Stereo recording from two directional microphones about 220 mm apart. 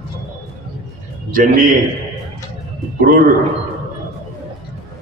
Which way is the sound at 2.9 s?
40° right (ahead or behind).